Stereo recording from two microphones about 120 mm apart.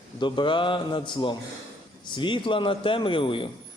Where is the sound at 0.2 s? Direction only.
40° left (ahead or behind).